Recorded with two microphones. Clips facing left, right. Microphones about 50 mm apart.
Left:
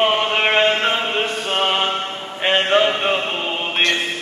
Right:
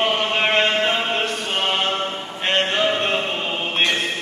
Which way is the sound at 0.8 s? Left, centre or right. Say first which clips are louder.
Left 1 dB; centre.